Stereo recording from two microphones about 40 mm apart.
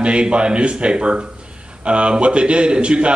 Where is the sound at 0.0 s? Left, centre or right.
Right.